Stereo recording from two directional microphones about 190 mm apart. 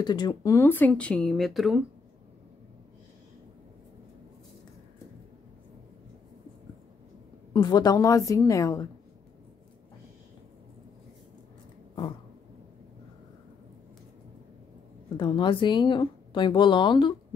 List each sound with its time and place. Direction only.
0.0 s speech: 20° left (ahead or behind); by 1.9 s centre (ahead or behind)
7.5 s a woman's voice: 20° left (ahead or behind)
15.1 s a woman's voice: 25° left (ahead or behind)